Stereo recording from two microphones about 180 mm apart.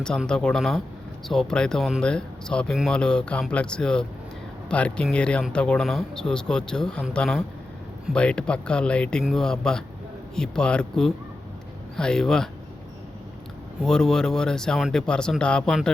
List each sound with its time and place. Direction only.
0.0 s speech: 5° left (ahead or behind)
13.8 s speech: 5° left (ahead or behind)